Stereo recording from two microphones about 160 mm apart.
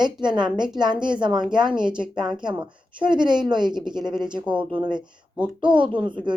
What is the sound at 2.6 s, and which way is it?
A woman's voice, 30° right (ahead or behind).